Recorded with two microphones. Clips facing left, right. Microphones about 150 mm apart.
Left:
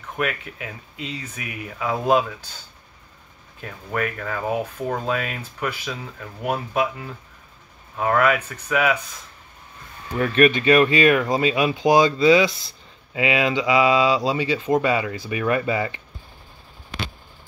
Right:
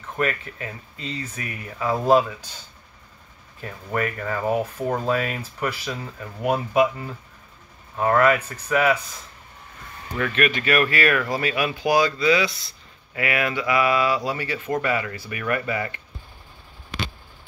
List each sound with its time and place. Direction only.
0.1 s speech: 5° left (ahead or behind)
3.6 s speech: centre (ahead or behind)
10.1 s speech: 35° left (ahead or behind)